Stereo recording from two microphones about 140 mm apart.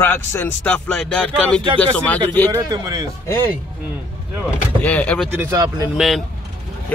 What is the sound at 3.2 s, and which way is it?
Speech, 15° left (ahead or behind).